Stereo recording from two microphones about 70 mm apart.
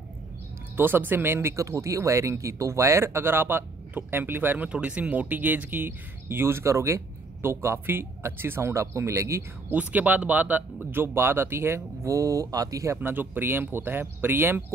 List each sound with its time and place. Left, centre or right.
0.7 s speech: right
1.6 s speech: right
4.6 s speech: centre; by 9.4 s right
9.7 s speech: right
12.9 s speech: right